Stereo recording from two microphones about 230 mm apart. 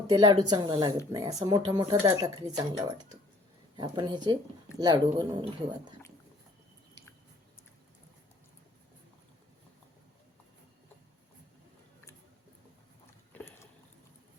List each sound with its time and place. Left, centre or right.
0.1 s speech: centre
13.3 s rowboat: centre